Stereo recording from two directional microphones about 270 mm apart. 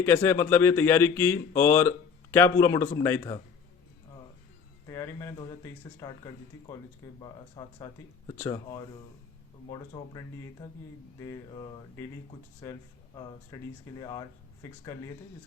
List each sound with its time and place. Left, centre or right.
0.0 s speech: centre
4.9 s speech: centre